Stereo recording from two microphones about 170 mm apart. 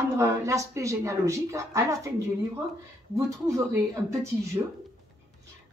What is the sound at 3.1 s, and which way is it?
Speech, 20° right (ahead or behind).